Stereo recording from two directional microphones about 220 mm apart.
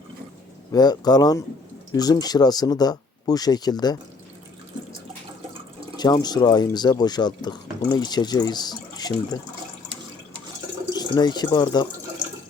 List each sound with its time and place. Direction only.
0.7 s speech: 20° left (ahead or behind)
6.0 s speech: 20° left (ahead or behind)
10.9 s speech: 20° left (ahead or behind)